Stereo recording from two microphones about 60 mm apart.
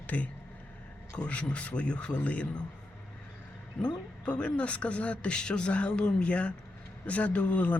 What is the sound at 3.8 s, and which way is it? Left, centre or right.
Speech, centre.